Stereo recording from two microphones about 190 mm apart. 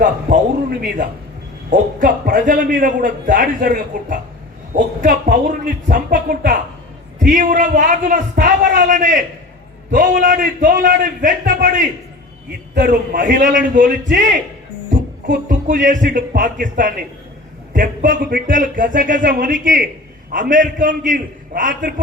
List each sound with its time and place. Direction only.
0.0 s a man's voice: 45° right (ahead or behind)
15.4 s a man's voice: 45° right (ahead or behind)